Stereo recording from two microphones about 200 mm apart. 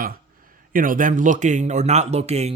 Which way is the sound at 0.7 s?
45° right (ahead or behind).